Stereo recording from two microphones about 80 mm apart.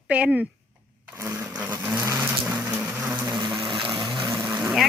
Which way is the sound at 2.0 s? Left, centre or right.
Right.